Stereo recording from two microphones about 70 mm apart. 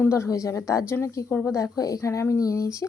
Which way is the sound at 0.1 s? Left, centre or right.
Left.